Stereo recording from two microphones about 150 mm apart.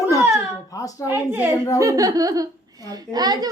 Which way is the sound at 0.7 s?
20° left (ahead or behind).